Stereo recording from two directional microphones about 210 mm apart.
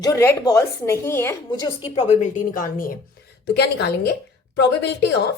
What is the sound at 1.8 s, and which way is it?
A woman's voice, 30° left (ahead or behind).